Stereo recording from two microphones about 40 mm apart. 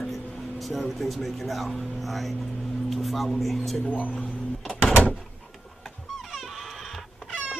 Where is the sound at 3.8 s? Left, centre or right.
Left.